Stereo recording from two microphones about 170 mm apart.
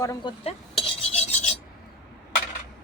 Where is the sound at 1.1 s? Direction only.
40° left (ahead or behind).